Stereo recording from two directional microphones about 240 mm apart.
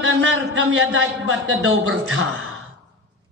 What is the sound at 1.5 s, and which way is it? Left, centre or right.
Speech, right.